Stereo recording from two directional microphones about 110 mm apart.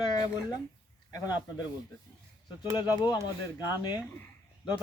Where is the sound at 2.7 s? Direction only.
35° left (ahead or behind).